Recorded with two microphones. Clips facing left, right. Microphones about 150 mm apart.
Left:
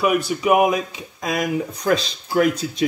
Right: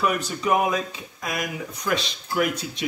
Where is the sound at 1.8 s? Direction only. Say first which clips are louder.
Left 4 dB; 40° left (ahead or behind).